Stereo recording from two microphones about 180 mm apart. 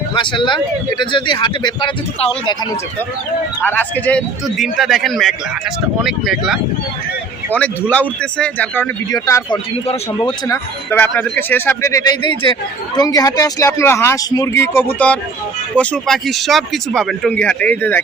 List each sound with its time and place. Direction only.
0.1 s speech: 25° left (ahead or behind)
3.6 s a man's voice: 10° left (ahead or behind)
9.1 s speech: 20° left (ahead or behind)
9.8 s speech: 30° left (ahead or behind)
10.9 s a man's voice: 10° left (ahead or behind)